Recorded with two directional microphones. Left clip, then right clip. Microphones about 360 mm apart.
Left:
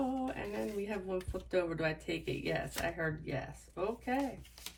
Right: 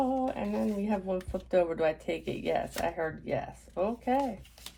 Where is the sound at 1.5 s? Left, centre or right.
Centre.